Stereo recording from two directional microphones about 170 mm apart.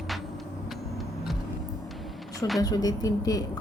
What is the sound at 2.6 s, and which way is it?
Speech, 20° left (ahead or behind).